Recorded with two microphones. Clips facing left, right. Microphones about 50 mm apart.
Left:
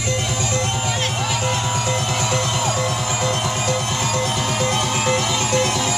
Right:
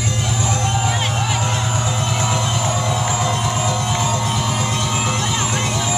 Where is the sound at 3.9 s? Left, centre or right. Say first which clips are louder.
Right 1 dB; right.